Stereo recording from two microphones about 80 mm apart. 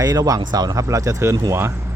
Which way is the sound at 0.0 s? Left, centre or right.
Right.